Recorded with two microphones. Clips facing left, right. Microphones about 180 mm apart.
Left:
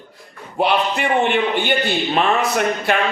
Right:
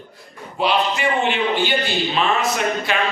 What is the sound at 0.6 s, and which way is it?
A man's voice, 55° left (ahead or behind).